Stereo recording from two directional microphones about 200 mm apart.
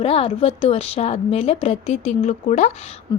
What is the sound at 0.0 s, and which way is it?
A woman's voice, 30° left (ahead or behind).